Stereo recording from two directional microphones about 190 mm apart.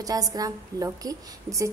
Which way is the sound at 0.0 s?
20° right (ahead or behind).